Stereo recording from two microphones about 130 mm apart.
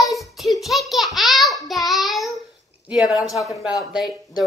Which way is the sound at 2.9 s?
5° right (ahead or behind).